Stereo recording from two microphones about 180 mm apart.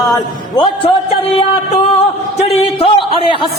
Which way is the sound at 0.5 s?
25° left (ahead or behind).